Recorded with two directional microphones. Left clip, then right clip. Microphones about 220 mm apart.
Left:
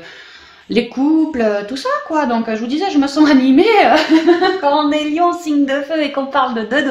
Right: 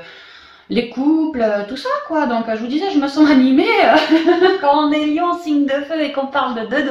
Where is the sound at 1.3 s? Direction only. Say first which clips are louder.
Left 1 dB; 40° left (ahead or behind).